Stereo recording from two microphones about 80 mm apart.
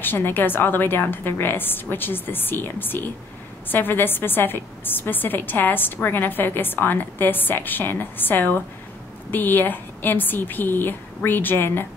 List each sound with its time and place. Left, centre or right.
0.0 s a woman's voice: left